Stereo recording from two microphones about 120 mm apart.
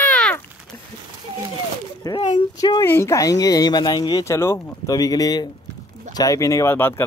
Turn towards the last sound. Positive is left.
turn(degrees=20)  # may be behind; listen again after turning